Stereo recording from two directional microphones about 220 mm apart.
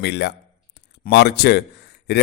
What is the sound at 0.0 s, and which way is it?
A man's voice, 50° left (ahead or behind).